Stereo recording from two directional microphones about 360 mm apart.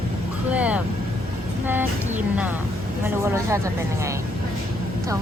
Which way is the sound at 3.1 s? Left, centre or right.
Centre.